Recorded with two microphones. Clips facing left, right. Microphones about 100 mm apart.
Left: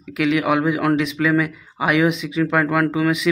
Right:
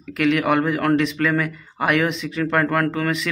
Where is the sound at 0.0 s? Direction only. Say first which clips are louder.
Even; centre (ahead or behind).